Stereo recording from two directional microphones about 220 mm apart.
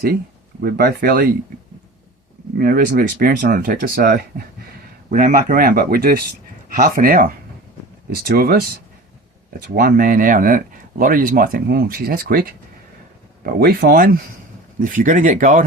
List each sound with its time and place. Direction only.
0.6 s speech: 45° right (ahead or behind)
2.6 s speech: 40° right (ahead or behind)